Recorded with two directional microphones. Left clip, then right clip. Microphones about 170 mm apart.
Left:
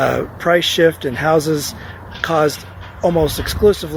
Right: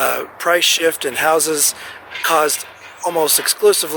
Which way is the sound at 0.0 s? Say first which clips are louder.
Left 1 dB; 20° right (ahead or behind).